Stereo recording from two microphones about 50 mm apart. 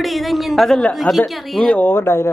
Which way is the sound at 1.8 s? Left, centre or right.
Left.